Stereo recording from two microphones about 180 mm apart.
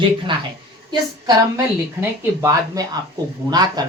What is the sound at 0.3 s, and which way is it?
Speech, 25° right (ahead or behind).